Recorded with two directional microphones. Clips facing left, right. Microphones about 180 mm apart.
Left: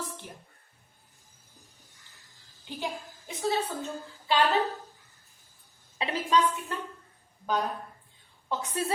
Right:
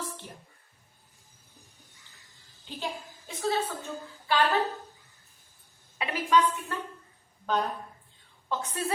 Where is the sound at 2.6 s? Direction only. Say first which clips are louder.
Left 1 dB; 15° left (ahead or behind).